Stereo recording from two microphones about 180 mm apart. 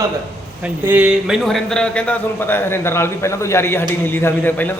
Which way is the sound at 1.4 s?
Centre (ahead or behind).